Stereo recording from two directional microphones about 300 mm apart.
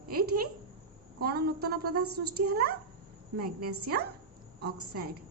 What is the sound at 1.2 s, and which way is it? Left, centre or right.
A woman's voice, right.